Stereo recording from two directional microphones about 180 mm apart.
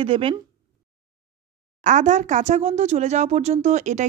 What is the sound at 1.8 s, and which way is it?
A woman's voice, 40° right (ahead or behind).